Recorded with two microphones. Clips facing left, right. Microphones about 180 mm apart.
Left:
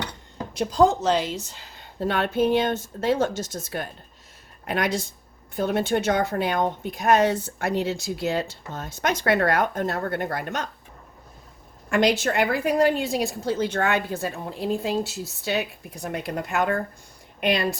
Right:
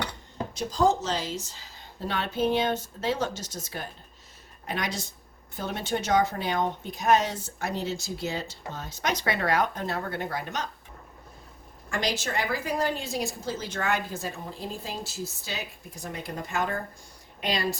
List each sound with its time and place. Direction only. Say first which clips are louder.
0.5 s speech: left 5 dB; 60° left (ahead or behind)
11.9 s speech: left 9 dB; 60° left (ahead or behind)